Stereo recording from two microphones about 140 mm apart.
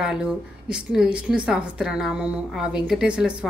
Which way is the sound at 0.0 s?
5° right (ahead or behind).